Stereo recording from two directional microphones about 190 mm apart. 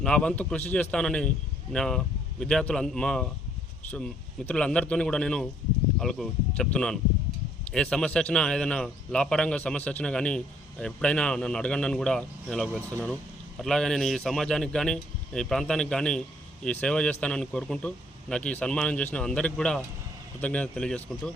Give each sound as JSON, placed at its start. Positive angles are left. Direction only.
{"t": 0.0, "sound": "a man's voice", "side_deg": 5}